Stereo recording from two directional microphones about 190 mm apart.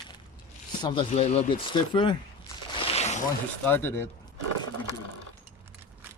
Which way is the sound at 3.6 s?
10° left (ahead or behind).